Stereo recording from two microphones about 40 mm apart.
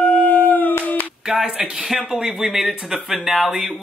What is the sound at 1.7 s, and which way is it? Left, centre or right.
Speech, centre.